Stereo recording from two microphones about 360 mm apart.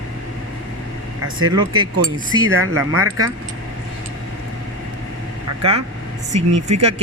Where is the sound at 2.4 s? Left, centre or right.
Right.